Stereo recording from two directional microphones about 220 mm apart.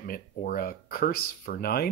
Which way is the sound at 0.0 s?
40° left (ahead or behind).